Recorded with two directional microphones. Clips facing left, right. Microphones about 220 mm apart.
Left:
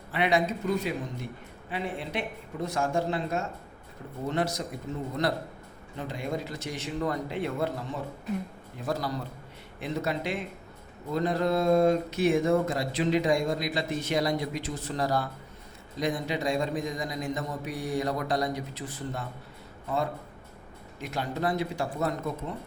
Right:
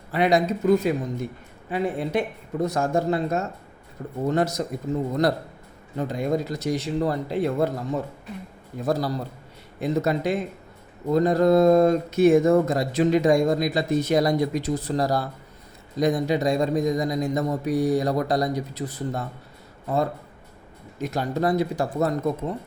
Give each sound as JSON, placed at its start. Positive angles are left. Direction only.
{"t": 0.1, "sound": "speech", "side_deg": -40}
{"t": 6.0, "sound": "speech", "side_deg": -40}
{"t": 21.0, "sound": "speech", "side_deg": -40}